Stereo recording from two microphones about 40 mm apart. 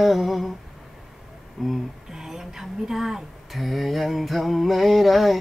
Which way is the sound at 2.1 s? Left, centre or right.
Centre.